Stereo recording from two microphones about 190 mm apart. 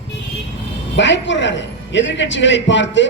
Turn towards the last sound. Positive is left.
turn(degrees=75)  # may be behind; listen again after turning